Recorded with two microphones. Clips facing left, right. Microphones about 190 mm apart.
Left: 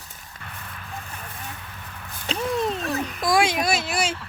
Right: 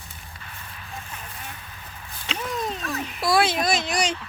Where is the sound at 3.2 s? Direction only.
15° left (ahead or behind).